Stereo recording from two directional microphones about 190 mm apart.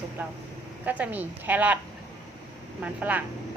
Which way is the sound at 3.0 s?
10° right (ahead or behind).